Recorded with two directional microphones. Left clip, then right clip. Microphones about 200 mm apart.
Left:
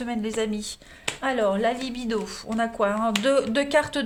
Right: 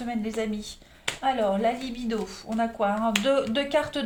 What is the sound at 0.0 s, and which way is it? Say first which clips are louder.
A woman's voice: left 3 dB; 45° left (ahead or behind).